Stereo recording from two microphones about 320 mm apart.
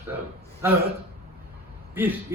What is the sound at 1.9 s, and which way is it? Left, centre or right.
Speech, centre.